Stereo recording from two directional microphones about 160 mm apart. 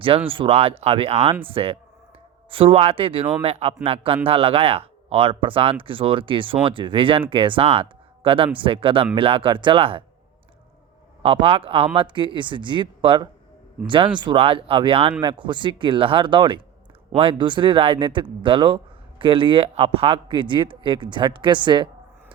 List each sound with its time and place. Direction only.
0.3 s speech: 35° right (ahead or behind)
11.2 s speech: 35° right (ahead or behind)